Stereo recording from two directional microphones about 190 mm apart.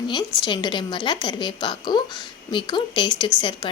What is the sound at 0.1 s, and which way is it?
A woman's voice, 25° left (ahead or behind).